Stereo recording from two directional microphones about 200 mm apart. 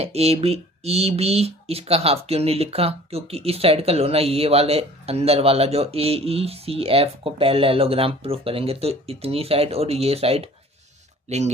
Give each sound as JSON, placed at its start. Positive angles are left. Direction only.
{"t": 0.0, "sound": "speech", "side_deg": -30}